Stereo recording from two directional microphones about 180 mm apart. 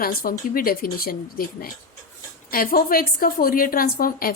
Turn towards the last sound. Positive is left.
turn(degrees=55)  # may be behind; listen again after turning